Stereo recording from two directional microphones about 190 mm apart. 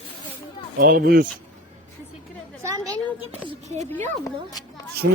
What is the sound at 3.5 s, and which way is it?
Speech, 35° right (ahead or behind).